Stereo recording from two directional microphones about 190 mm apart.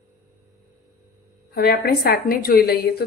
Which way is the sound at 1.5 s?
55° left (ahead or behind).